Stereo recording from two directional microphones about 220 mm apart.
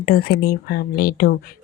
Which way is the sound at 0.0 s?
45° left (ahead or behind).